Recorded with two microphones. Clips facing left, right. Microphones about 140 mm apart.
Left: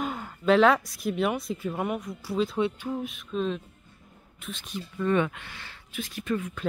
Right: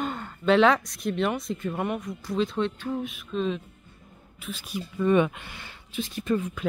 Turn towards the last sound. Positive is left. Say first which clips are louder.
# right 3 dB
turn(degrees=-30)  # may be behind; listen again after turning